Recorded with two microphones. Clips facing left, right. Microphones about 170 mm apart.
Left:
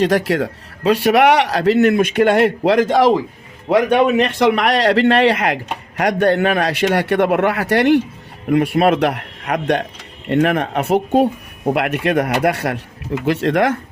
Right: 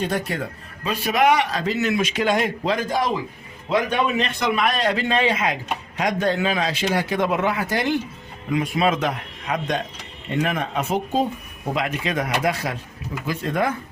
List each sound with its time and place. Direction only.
0.0 s speech: 90° left
0.9 s a man's voice: 70° left (ahead or behind)
3.7 s a man's voice: 65° left (ahead or behind)